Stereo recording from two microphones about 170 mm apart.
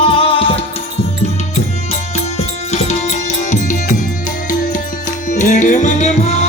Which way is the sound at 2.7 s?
40° left (ahead or behind).